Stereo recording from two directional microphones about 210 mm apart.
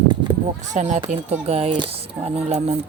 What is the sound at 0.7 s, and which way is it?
Speech, 35° right (ahead or behind).